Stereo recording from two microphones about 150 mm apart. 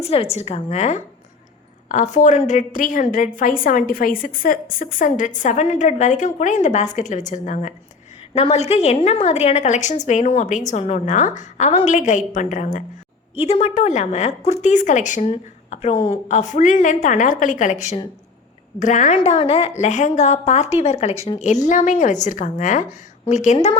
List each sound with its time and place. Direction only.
0.0 s a woman's voice: 40° left (ahead or behind)
8.4 s a woman's voice: 45° left (ahead or behind); by 12.8 s 60° left (ahead or behind)
13.3 s a woman's voice: 40° left (ahead or behind)
19.8 s a woman's voice: 50° left (ahead or behind)